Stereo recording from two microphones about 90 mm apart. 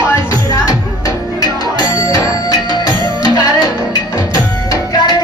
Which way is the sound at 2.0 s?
40° left (ahead or behind).